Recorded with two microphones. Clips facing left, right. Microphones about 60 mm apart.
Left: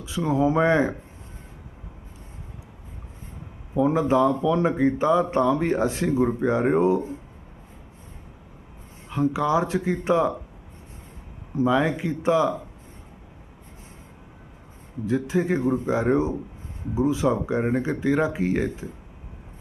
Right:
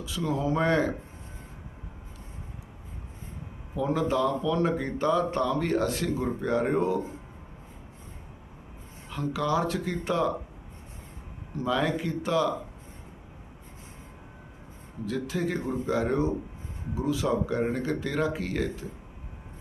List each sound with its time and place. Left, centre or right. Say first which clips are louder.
0.0 s speech: left 7 dB; left
3.8 s speech: left 6 dB; left
9.0 s speech: left 6 dB; centre
11.5 s speech: left 6 dB; centre
15.0 s speech: left 6 dB; left